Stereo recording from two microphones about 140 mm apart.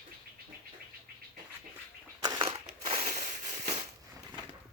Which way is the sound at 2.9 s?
45° right (ahead or behind).